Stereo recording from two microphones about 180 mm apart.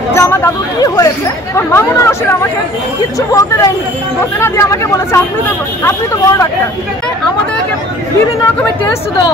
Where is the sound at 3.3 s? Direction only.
15° left (ahead or behind).